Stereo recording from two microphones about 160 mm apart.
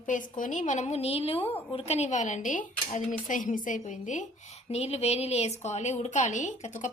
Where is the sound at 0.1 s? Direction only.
55° left (ahead or behind).